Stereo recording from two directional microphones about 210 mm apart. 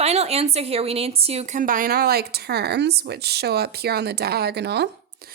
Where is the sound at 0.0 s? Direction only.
30° right (ahead or behind); by 4.9 s 50° right (ahead or behind).